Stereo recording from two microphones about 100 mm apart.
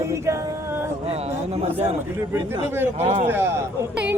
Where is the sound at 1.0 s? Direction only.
90° right.